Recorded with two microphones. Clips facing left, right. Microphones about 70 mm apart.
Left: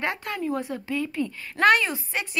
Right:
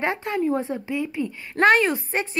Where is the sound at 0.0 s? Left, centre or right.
Right.